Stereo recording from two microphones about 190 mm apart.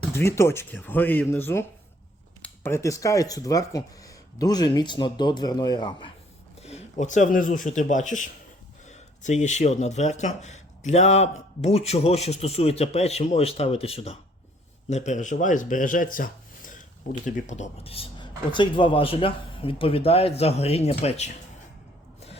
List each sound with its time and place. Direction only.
0.1 s speech: 15° left (ahead or behind)
6.6 s speech: 35° left (ahead or behind)